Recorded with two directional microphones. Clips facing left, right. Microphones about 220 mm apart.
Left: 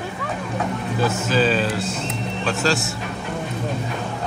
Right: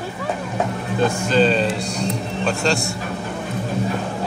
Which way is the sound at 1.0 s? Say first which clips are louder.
Right 3 dB; 5° left (ahead or behind).